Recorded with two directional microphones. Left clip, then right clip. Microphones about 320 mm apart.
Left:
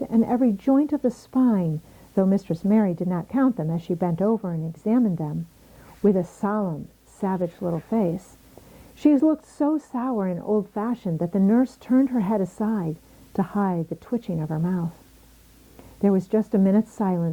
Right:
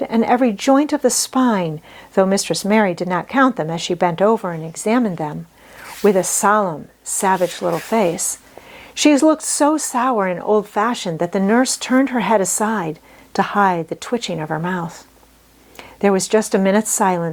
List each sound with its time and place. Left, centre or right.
0.0 s speech: centre
9.2 s speech: centre
9.5 s speech: centre